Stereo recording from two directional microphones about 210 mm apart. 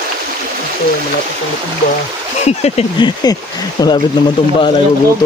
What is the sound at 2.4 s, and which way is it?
Speech, 30° left (ahead or behind).